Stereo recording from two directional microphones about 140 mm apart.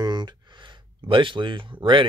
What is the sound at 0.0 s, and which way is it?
Speech, 30° right (ahead or behind).